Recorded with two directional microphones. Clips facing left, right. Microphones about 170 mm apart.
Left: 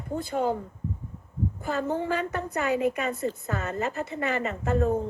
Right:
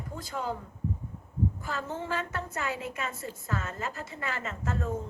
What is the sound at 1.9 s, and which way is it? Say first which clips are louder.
Speech: left 6 dB; 15° left (ahead or behind).